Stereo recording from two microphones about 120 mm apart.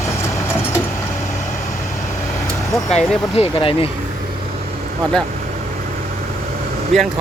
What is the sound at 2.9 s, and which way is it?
Speech, 65° left (ahead or behind).